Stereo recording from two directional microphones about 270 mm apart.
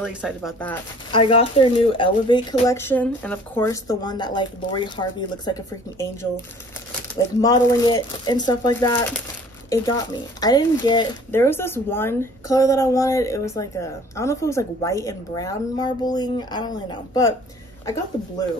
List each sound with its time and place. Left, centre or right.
0.0 s speech: centre
1.1 s speech: centre
7.4 s speech: centre